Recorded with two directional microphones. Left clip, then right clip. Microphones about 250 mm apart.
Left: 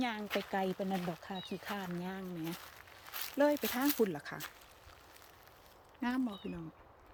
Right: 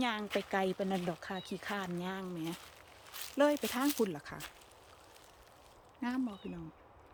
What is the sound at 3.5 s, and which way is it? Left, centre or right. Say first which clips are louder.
Speech: even; centre.